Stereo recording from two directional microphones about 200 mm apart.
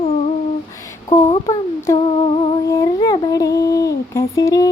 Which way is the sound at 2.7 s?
15° left (ahead or behind).